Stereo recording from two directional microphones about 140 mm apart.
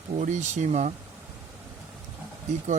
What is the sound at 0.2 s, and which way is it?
Speech, 60° right (ahead or behind).